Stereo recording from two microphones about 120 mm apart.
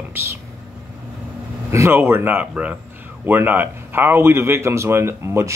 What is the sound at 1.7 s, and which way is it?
Speech, 20° right (ahead or behind).